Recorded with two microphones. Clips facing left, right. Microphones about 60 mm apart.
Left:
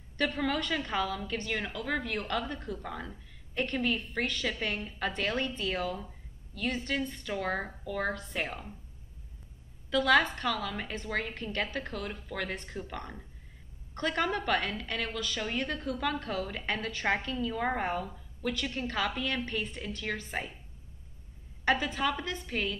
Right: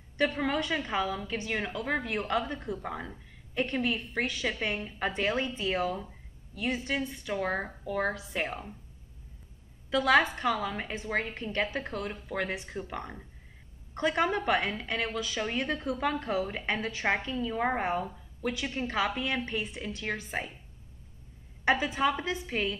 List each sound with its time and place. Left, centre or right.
0.2 s a woman's voice: centre
9.8 s a woman's voice: centre
17.4 s a woman's voice: right; by 20.4 s centre
21.6 s a woman's voice: centre